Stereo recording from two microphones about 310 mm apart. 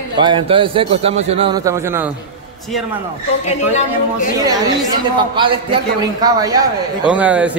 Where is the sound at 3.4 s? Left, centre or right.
Left.